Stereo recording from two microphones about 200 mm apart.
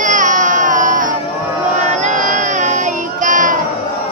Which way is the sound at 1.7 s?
35° right (ahead or behind).